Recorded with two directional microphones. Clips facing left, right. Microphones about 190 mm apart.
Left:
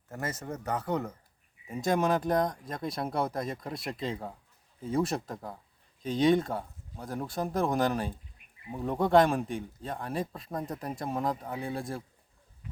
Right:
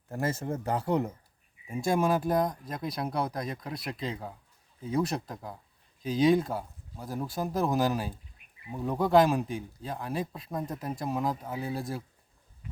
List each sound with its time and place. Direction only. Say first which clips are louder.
0.1 s speech: right 5 dB; 30° right (ahead or behind)
1.6 s speech: right 1 dB; 10° right (ahead or behind)